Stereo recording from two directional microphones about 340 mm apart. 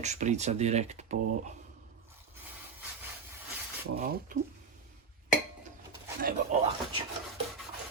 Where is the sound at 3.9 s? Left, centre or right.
Right.